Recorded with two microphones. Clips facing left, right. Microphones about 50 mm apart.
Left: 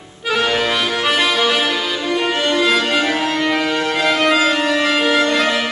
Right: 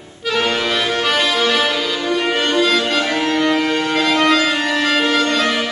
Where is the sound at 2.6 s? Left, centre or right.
Centre.